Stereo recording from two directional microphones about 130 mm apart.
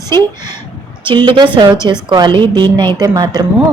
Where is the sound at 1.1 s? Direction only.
40° right (ahead or behind).